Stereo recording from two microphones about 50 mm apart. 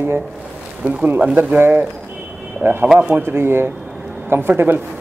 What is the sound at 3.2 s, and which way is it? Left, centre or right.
A man's voice, right.